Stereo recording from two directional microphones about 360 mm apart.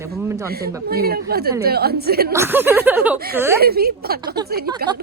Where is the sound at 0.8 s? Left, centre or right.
Right.